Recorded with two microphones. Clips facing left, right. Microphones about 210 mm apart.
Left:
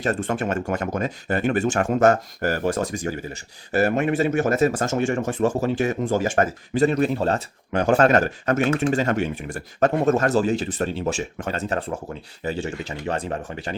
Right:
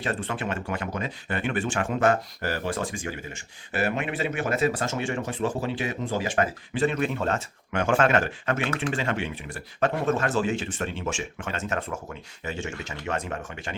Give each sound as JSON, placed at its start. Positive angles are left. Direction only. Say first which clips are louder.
{"t": 0.0, "sound": "speech", "louder": "left 6 dB", "side_deg": 45}